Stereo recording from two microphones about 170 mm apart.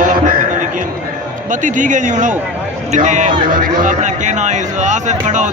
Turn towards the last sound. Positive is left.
turn(degrees=-45)  # may be behind; listen again after turning